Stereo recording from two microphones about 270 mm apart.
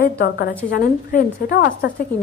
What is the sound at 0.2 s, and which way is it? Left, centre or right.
A woman's voice, left.